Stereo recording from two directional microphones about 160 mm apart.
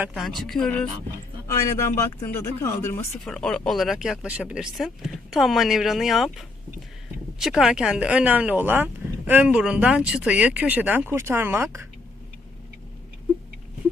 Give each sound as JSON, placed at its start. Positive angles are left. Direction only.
{"t": 0.0, "sound": "speech", "side_deg": -5}
{"t": 1.5, "sound": "speech", "side_deg": 15}
{"t": 3.2, "sound": "speech", "side_deg": 5}
{"t": 7.3, "sound": "speech", "side_deg": 0}